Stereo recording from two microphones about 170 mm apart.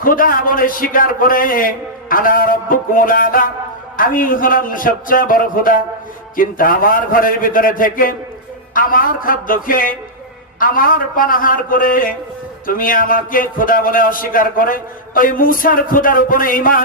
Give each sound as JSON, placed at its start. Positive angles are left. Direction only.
{"t": 0.0, "sound": "a man's voice", "side_deg": 55}